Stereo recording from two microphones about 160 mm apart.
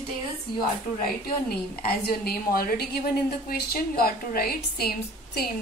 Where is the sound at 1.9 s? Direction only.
70° left (ahead or behind).